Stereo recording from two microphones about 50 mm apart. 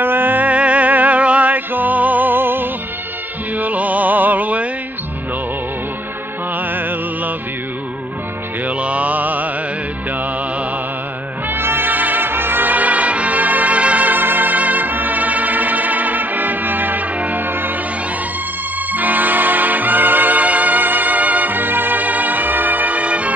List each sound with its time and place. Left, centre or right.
0.0 s music: right
3.5 s music: right
6.7 s music: right
8.6 s mantra: right
11.4 s brass instrument: right
18.9 s music: right